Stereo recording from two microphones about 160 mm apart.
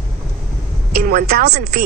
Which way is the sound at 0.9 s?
70° right (ahead or behind).